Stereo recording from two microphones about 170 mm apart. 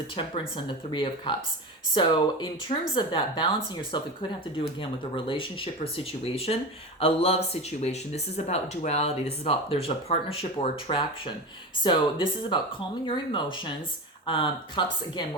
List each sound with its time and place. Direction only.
0.2 s speech: 30° left (ahead or behind)